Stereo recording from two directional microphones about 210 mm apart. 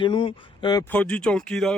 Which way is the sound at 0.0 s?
25° left (ahead or behind).